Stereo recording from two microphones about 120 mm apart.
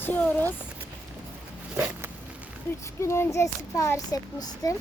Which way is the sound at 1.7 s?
20° right (ahead or behind).